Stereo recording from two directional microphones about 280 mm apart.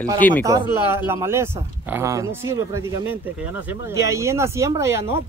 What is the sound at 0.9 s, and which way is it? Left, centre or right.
Speech, centre.